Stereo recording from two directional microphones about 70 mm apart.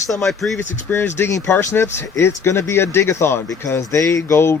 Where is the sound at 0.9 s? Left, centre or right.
Left.